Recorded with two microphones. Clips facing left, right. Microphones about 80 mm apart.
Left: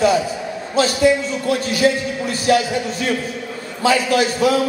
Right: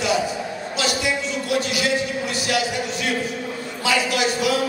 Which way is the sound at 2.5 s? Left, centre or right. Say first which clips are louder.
Left 8 dB; left.